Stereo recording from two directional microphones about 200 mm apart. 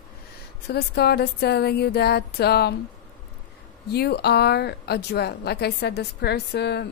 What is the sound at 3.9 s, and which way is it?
A woman's voice, 55° left (ahead or behind).